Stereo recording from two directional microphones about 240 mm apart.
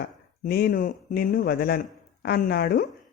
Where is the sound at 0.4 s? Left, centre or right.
Left.